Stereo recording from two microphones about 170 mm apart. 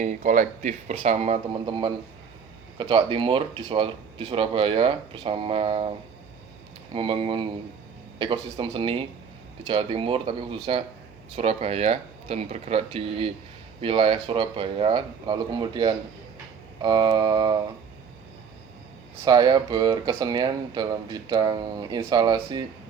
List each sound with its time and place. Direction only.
0.0 s speech: 45° right (ahead or behind)
6.9 s speech: 30° right (ahead or behind)
19.2 s speech: 25° right (ahead or behind)